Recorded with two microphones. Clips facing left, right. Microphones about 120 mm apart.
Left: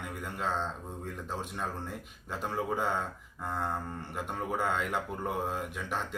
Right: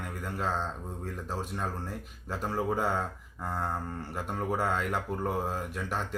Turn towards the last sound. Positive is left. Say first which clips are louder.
# right 2 dB
turn(degrees=-5)  # may be behind; listen again after turning